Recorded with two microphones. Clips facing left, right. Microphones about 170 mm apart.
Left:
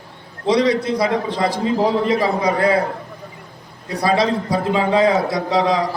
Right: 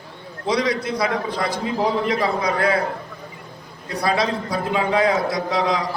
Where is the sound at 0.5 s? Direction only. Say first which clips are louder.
Left 5 dB; 25° left (ahead or behind).